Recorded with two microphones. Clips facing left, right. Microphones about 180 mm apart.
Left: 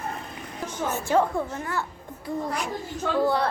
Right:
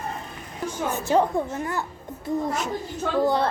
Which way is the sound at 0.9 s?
20° right (ahead or behind).